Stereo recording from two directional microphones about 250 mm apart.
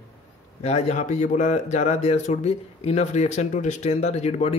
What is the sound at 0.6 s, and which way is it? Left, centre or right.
Speech, left.